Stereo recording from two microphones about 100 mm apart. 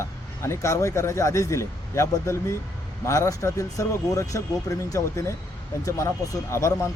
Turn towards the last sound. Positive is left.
turn(degrees=30)  # may be behind; listen again after turning